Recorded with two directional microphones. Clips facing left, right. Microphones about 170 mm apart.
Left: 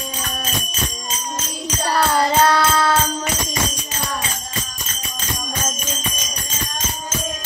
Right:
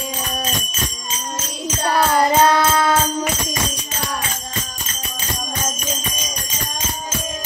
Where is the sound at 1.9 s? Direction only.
15° right (ahead or behind).